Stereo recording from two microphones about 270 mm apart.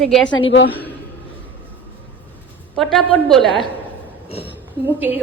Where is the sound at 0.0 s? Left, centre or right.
Centre.